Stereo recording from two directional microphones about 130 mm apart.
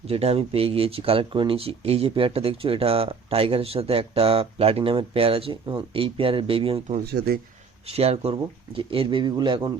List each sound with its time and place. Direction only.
0.1 s speech: 50° right (ahead or behind)
7.9 s speech: 50° right (ahead or behind)